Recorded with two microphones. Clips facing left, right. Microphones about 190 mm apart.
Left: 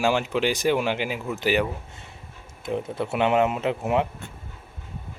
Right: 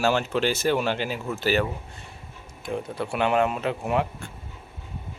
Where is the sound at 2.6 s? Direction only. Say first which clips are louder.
Left 2 dB; 25° left (ahead or behind).